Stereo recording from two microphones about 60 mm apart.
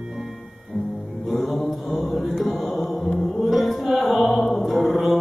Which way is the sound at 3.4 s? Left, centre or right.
Centre.